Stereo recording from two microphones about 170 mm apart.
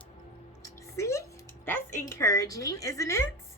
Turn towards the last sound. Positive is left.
turn(degrees=20)  # may be behind; listen again after turning